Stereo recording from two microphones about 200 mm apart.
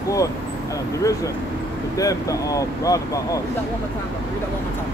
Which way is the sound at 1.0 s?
15° left (ahead or behind).